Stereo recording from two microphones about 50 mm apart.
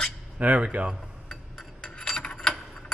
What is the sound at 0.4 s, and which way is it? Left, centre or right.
Speech, right.